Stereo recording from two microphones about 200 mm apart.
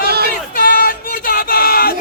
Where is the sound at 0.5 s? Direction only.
45° left (ahead or behind).